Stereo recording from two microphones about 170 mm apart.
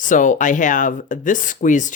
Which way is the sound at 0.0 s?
50° left (ahead or behind).